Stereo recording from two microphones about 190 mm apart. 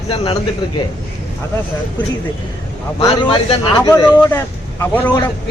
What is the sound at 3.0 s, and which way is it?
Speech, 25° left (ahead or behind).